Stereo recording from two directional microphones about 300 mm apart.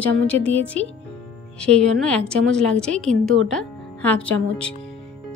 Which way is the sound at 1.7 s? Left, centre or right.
Right.